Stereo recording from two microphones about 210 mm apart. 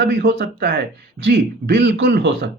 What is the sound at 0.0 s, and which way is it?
A man's voice, 55° right (ahead or behind).